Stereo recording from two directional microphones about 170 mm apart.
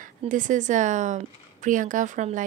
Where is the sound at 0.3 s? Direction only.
50° right (ahead or behind).